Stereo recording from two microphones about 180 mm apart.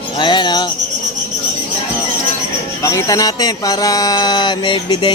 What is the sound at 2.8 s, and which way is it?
Speech, 20° left (ahead or behind).